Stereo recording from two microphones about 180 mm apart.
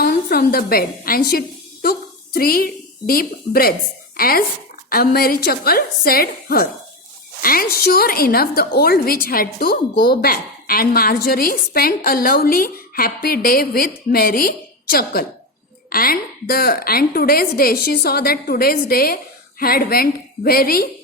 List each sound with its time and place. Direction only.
0.0 s a woman's voice: 60° left (ahead or behind)